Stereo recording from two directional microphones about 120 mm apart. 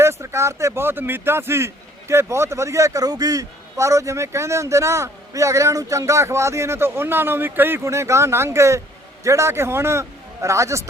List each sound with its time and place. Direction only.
0.0 s speech: 25° right (ahead or behind)